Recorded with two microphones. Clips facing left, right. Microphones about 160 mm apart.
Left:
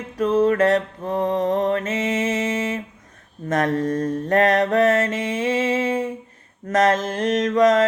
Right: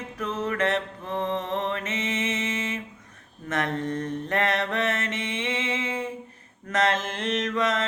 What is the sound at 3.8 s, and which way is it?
Mantra, 35° left (ahead or behind).